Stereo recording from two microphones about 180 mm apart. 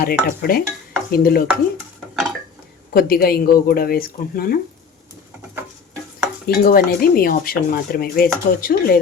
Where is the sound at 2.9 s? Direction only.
55° left (ahead or behind).